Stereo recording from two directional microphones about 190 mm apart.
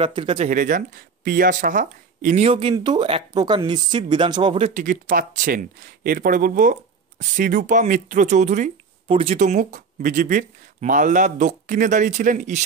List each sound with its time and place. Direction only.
0.0 s speech: 25° right (ahead or behind)
0.5 s speech: 45° right (ahead or behind)
4.8 s speech: 45° right (ahead or behind)